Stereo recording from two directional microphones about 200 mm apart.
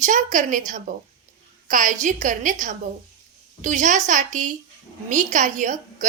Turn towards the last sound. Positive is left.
turn(degrees=-40)  # may be behind; listen again after turning